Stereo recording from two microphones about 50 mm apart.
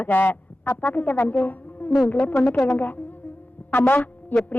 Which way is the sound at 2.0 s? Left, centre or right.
Left.